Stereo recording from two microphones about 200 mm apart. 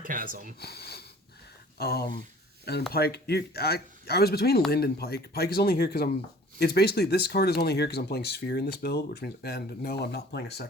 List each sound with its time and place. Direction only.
0.0 s speech: 45° right (ahead or behind)
0.6 s speech: 55° left (ahead or behind)